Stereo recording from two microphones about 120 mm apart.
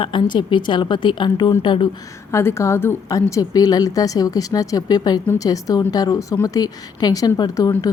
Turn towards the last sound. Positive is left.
turn(degrees=30)  # may be behind; listen again after turning